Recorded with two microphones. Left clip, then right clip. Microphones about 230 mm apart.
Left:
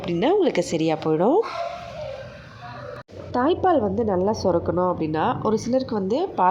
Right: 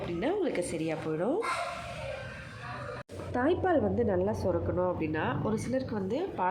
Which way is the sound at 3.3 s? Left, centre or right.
Centre.